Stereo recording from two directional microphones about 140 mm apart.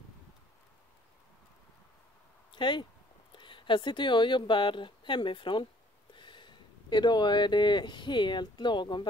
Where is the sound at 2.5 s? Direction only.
35° left (ahead or behind).